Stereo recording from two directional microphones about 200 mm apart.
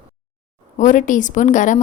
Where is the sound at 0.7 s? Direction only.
40° left (ahead or behind).